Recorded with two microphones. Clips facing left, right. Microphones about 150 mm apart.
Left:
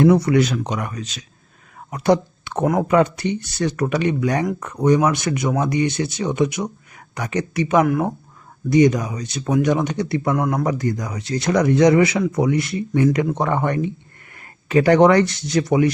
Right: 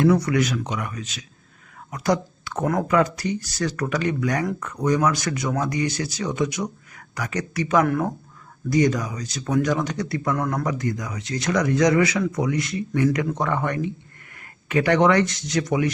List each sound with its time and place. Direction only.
0.1 s speech: 25° left (ahead or behind)
10.6 s speech: 30° left (ahead or behind)